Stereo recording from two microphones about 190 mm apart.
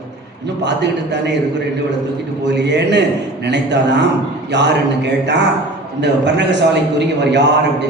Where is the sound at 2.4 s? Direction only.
65° right (ahead or behind).